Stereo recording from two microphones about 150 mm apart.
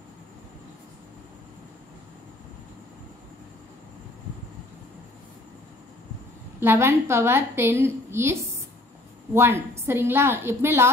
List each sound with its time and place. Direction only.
6.6 s a woman's voice: 15° right (ahead or behind)